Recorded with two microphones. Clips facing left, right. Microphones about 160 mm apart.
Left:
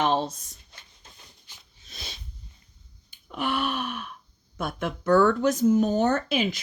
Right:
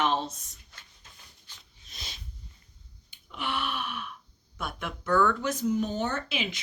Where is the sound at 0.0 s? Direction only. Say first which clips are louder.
Left 4 dB; 30° left (ahead or behind).